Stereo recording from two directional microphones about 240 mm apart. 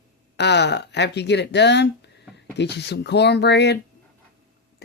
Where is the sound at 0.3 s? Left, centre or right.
Left.